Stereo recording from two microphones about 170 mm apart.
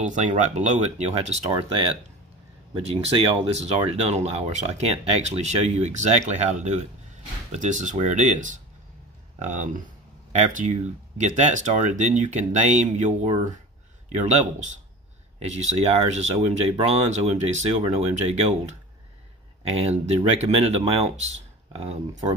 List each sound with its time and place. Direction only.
0.0 s speech: 45° right (ahead or behind)
20.3 s speech: 35° right (ahead or behind)